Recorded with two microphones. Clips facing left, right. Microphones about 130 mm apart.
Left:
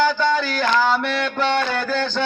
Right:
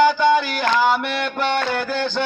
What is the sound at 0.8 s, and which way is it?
Mantra, 15° right (ahead or behind).